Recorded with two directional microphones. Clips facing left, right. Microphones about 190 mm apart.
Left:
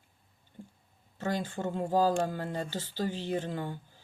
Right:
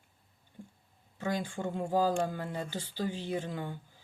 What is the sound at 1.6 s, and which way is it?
Speech, 40° left (ahead or behind).